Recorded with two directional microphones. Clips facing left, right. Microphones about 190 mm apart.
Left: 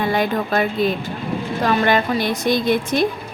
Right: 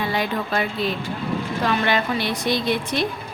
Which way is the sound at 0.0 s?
50° left (ahead or behind).